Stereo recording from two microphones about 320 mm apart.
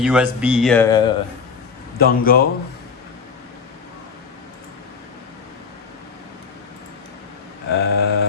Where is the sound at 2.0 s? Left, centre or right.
Left.